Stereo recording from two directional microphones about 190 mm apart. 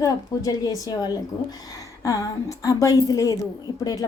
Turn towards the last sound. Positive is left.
turn(degrees=20)  # may be behind; listen again after turning